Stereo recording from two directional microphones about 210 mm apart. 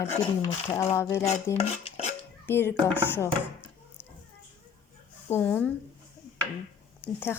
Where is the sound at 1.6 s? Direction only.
30° left (ahead or behind).